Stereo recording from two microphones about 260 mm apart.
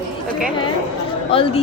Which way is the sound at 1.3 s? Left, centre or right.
Left.